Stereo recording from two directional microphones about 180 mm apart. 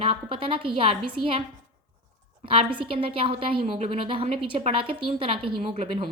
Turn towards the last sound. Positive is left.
turn(degrees=-35)  # may be behind; listen again after turning